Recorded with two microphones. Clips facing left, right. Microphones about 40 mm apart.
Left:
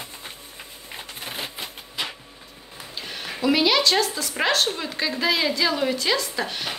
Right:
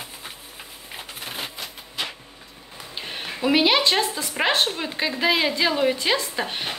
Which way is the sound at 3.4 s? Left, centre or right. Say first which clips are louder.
Right 1 dB; right.